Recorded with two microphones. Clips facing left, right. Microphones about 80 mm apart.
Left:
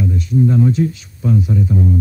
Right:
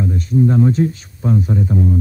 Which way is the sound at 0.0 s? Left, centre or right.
Right.